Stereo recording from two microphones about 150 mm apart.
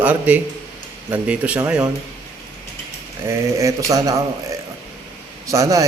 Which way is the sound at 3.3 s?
20° right (ahead or behind).